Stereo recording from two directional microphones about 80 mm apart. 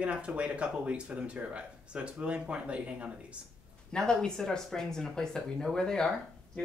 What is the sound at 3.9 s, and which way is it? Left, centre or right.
Speech, centre.